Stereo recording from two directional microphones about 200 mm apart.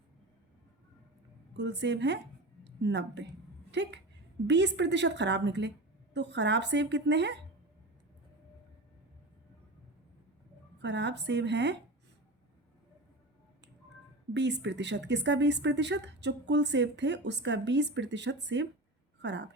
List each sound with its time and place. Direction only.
1.5 s a woman's voice: 60° right (ahead or behind)
10.8 s speech: 60° right (ahead or behind)
14.3 s speech: 60° right (ahead or behind)